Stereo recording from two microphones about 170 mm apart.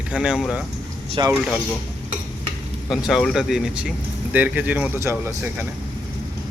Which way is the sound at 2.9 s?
Centre (ahead or behind).